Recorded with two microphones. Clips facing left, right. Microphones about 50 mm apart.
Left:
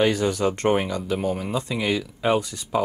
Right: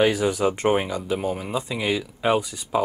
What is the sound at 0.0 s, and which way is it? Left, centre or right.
Speech, centre.